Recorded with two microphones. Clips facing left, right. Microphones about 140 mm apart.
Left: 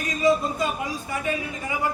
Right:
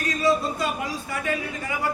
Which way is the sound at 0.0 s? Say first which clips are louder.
Left 1 dB; 20° left (ahead or behind).